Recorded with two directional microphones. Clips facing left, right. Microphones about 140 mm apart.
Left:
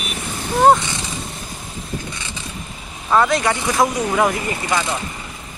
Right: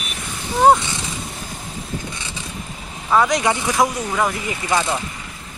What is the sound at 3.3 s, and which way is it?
Speech, 15° right (ahead or behind).